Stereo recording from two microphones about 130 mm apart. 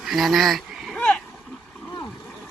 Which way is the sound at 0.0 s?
Centre (ahead or behind).